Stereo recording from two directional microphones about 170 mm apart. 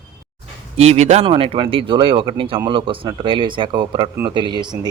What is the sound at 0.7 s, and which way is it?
A man's voice, 40° right (ahead or behind).